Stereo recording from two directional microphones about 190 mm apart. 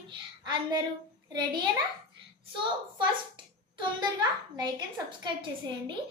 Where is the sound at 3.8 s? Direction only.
20° right (ahead or behind).